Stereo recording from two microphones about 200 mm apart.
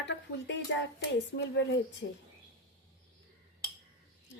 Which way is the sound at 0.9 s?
60° left (ahead or behind).